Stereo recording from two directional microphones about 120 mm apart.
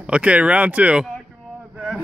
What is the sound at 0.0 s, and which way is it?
Speech, 10° right (ahead or behind).